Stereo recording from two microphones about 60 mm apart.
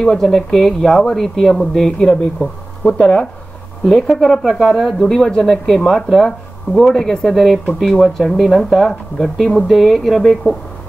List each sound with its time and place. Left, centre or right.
0.0 s speech: centre